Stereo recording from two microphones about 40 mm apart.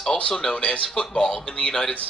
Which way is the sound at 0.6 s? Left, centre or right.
Left.